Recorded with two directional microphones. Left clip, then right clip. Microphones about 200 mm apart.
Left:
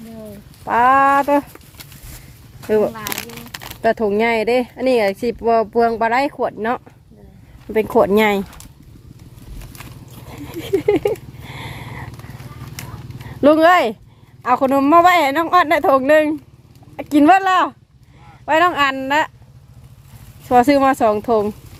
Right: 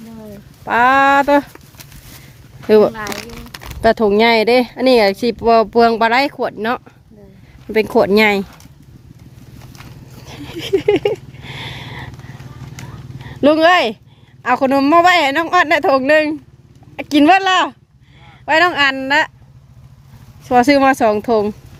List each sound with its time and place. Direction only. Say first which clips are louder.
0.6 s speech: right 1 dB; 15° right (ahead or behind)
2.6 s speech: right 6 dB; 35° right (ahead or behind)
3.0 s crumpling: right 2 dB; 5° right (ahead or behind)
3.9 s speech: right 7 dB; 30° right (ahead or behind)
6.0 s speech: right 3 dB; 15° right (ahead or behind)
10.2 s a sound: right 3 dB; 5° right (ahead or behind)
13.2 s speech: even; centre (ahead or behind)
20.7 s speech: right 2 dB; 20° right (ahead or behind)